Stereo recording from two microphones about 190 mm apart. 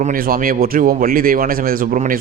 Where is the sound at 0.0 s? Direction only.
50° right (ahead or behind).